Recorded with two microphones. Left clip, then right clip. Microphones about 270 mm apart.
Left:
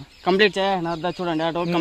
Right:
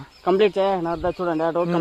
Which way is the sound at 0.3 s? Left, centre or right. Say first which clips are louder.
Even; left.